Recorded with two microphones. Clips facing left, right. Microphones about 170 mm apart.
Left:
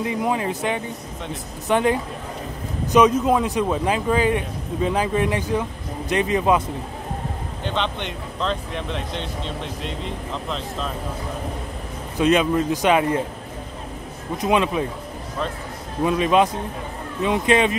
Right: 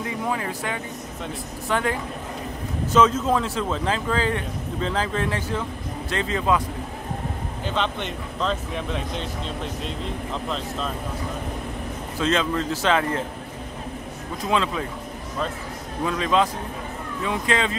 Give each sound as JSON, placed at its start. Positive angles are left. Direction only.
{"t": 0.0, "sound": "speech", "side_deg": 20}
{"t": 7.6, "sound": "speech", "side_deg": 0}
{"t": 12.2, "sound": "speech", "side_deg": 15}
{"t": 14.4, "sound": "speech", "side_deg": 20}
{"t": 16.0, "sound": "speech", "side_deg": 20}